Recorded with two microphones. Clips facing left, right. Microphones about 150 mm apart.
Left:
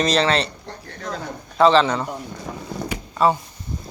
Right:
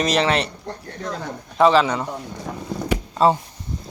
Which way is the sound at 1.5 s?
10° right (ahead or behind).